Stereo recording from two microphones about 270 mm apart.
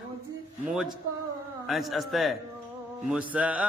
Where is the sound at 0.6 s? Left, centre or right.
Centre.